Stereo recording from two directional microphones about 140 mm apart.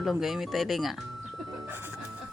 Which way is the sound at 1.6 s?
15° right (ahead or behind).